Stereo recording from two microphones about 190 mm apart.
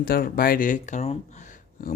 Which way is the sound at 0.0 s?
50° left (ahead or behind).